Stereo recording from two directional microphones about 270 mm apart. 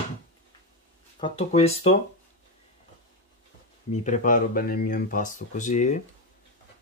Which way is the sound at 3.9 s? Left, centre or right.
Left.